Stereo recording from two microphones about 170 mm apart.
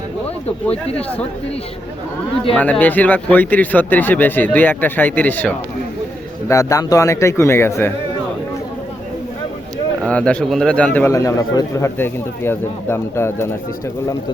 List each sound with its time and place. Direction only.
0.4 s speech: 35° left (ahead or behind)
2.6 s a man's voice: 10° left (ahead or behind)
10.0 s a man's voice: 5° left (ahead or behind)